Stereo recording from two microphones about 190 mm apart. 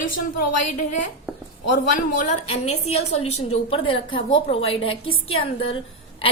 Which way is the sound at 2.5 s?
35° left (ahead or behind).